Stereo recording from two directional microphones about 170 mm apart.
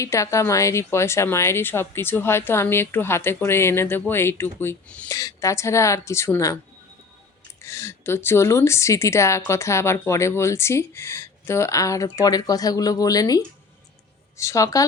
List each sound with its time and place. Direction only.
0.0 s a woman's voice: 15° left (ahead or behind)
7.6 s a woman's voice: 15° left (ahead or behind)